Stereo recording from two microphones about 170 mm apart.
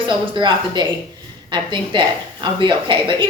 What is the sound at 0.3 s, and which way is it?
A woman's voice, 25° right (ahead or behind).